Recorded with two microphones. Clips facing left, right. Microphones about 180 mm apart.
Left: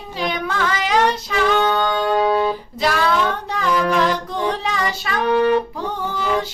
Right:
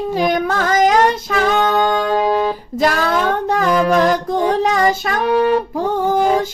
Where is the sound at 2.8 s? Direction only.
45° right (ahead or behind).